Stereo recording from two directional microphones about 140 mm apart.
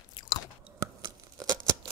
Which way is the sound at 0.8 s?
30° right (ahead or behind).